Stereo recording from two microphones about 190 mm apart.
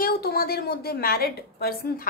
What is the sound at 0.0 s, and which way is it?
Speech, 55° left (ahead or behind).